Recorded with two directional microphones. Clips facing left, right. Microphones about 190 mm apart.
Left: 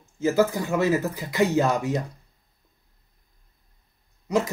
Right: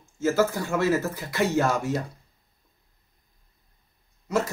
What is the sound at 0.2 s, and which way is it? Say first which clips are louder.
Speech: left 2 dB; 15° left (ahead or behind).